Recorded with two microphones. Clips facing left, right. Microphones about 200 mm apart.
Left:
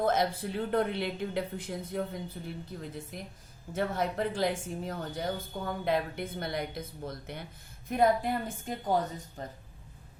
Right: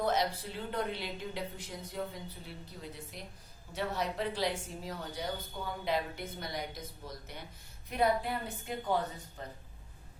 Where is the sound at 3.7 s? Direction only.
50° left (ahead or behind).